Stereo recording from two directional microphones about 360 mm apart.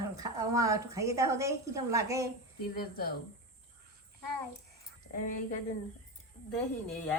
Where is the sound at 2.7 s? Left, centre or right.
Left.